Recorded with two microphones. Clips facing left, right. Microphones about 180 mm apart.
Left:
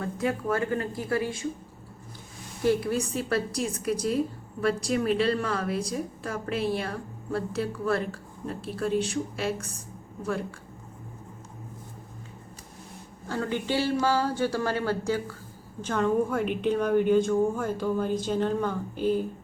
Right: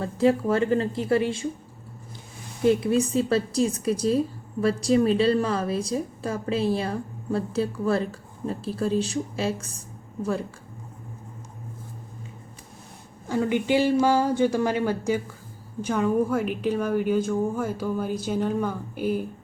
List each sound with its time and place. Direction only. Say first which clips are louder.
0.0 s a woman's voice: right 7 dB; 30° right (ahead or behind)
2.6 s a woman's voice: right 4 dB; 20° right (ahead or behind)
13.2 s a woman's voice: right 6 dB; 15° right (ahead or behind)